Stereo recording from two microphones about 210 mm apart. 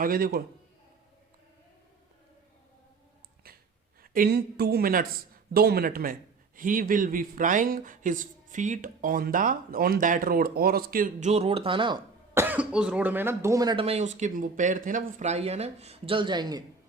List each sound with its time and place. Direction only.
0.0 s speech: 45° right (ahead or behind)
4.0 s speech: 45° right (ahead or behind); by 16.6 s 20° right (ahead or behind)